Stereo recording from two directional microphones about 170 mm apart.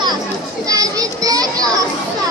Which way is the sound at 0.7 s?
20° right (ahead or behind).